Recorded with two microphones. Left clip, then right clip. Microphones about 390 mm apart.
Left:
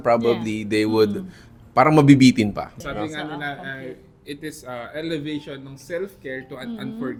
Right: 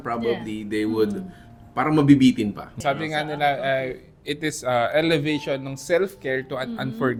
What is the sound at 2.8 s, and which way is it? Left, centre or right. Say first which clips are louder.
Speech: right 9 dB; right.